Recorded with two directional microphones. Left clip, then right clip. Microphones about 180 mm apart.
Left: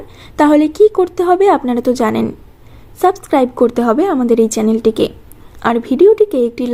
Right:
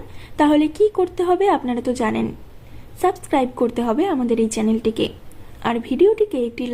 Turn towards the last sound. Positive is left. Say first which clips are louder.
# left 8 dB
turn(degrees=35)  # may be behind; listen again after turning